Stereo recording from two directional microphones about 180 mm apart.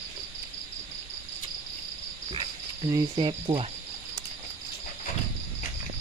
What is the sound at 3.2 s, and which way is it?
Speech, 30° right (ahead or behind).